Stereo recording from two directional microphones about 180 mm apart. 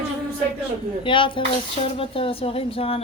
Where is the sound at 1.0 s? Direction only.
30° left (ahead or behind).